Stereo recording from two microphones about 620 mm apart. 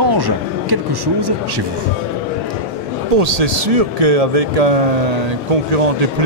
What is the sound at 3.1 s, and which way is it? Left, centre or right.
Speech, right.